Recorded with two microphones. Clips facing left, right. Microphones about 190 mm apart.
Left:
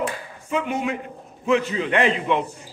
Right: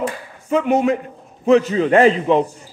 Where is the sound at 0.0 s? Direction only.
40° right (ahead or behind).